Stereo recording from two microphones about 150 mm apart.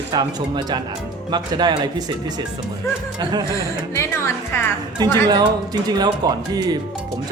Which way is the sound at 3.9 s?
15° left (ahead or behind).